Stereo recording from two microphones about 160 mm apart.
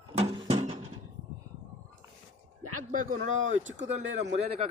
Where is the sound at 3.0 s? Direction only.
50° right (ahead or behind).